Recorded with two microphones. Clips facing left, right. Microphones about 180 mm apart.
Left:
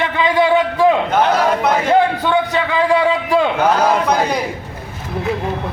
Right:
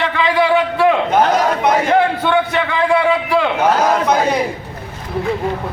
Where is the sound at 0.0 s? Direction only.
20° left (ahead or behind).